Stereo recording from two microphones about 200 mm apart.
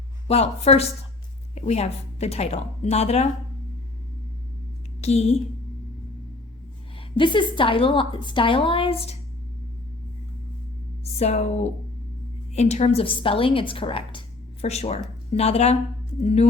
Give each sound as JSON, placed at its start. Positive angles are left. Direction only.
{"t": 0.3, "sound": "a woman's voice", "side_deg": 30}
{"t": 4.9, "sound": "a woman's voice", "side_deg": 35}
{"t": 7.2, "sound": "a woman's voice", "side_deg": 25}
{"t": 11.0, "sound": "a woman's voice", "side_deg": 35}